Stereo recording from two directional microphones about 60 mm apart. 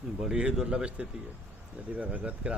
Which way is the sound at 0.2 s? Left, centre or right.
Centre.